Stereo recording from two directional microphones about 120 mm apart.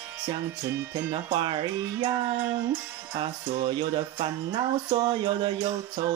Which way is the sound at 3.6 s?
45° right (ahead or behind).